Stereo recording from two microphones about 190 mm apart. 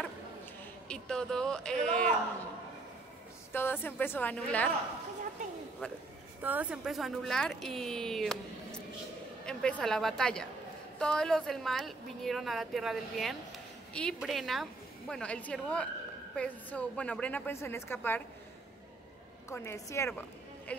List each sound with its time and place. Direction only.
0.8 s a woman's voice: 5° left (ahead or behind)
3.5 s a woman's voice: 10° left (ahead or behind)
5.4 s a sound: 40° right (ahead or behind)
6.4 s a woman's voice: 10° right (ahead or behind); by 18.2 s 10° left (ahead or behind)
19.5 s a woman's voice: 15° left (ahead or behind)